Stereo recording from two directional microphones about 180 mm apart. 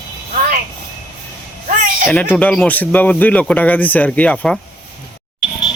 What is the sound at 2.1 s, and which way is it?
Speech, 5° left (ahead or behind).